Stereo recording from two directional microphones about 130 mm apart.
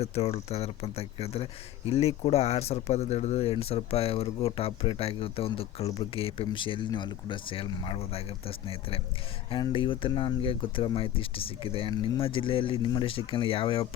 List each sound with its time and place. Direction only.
0.0 s speech: 55° left (ahead or behind)